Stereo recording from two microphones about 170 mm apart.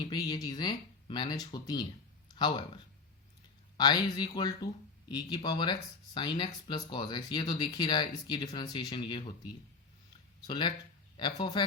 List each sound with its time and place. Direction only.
0.0 s speech: 25° left (ahead or behind)
3.8 s speech: 25° left (ahead or behind)
10.4 s speech: 25° left (ahead or behind)